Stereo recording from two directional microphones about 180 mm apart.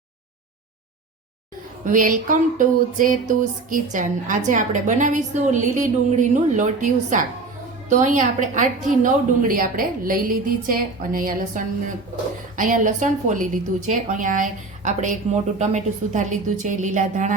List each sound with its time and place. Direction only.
1.8 s a woman's voice: 45° right (ahead or behind)